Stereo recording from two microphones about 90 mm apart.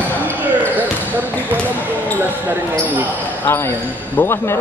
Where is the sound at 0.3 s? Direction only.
20° right (ahead or behind).